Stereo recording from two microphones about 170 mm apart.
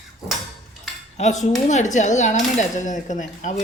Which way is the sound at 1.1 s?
40° left (ahead or behind).